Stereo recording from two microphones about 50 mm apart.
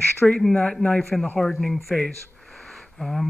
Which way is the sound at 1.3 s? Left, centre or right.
Centre.